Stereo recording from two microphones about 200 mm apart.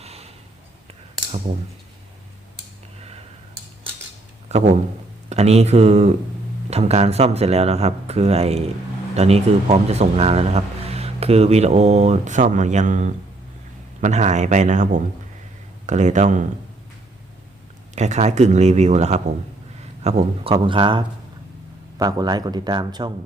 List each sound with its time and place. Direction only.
0.0 s sniff: 30° right (ahead or behind)
4.4 s a sound: 35° right (ahead or behind)
5.3 s a man's voice: 30° right (ahead or behind)
17.9 s a man's voice: 35° right (ahead or behind)